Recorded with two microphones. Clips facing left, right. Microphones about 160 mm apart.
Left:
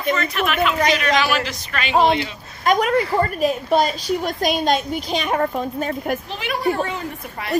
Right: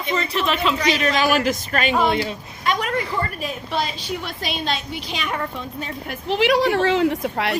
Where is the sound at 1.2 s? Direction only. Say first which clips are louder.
Right 2 dB; 45° right (ahead or behind).